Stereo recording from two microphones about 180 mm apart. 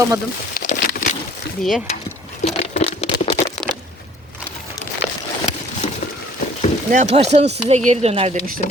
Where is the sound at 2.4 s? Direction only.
35° left (ahead or behind).